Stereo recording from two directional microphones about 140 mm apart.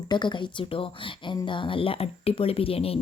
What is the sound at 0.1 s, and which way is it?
Speech, 35° left (ahead or behind).